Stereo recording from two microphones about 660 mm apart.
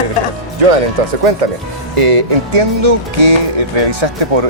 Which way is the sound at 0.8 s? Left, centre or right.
Right.